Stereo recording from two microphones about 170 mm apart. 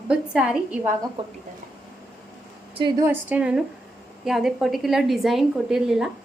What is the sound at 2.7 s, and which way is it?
Speech, 25° right (ahead or behind).